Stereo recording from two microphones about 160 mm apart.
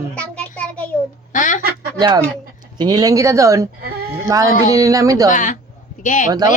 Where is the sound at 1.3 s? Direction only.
55° left (ahead or behind).